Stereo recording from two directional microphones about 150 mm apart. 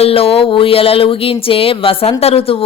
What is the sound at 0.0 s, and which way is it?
Speech, 40° left (ahead or behind).